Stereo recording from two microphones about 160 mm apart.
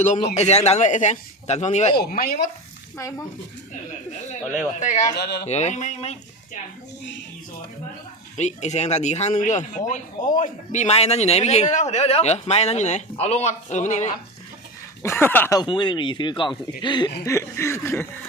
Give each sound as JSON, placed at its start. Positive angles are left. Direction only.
{"t": 0.3, "sound": "a man's voice", "side_deg": 45}
{"t": 2.0, "sound": "speech", "side_deg": 70}
{"t": 4.8, "sound": "a man's voice", "side_deg": 50}
{"t": 5.1, "sound": "speech", "side_deg": 90}
{"t": 5.5, "sound": "a man's voice", "side_deg": 45}
{"t": 8.4, "sound": "a man's voice", "side_deg": 45}
{"t": 15.0, "sound": "chuckle", "side_deg": 15}
{"t": 15.5, "sound": "speech", "side_deg": 30}
{"t": 17.2, "sound": "chuckle", "side_deg": 15}